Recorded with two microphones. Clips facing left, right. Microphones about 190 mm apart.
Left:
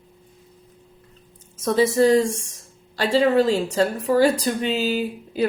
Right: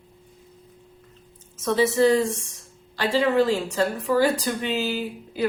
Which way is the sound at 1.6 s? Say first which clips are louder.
Left 2 dB; 45° left (ahead or behind).